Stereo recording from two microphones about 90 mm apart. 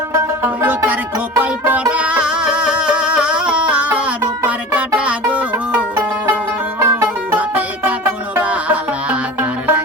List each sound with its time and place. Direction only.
0.1 s music: 25° right (ahead or behind)
6.7 s music: 30° right (ahead or behind)